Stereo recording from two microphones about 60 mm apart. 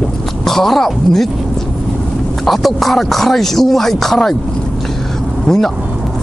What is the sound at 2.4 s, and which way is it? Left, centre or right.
Speech, centre.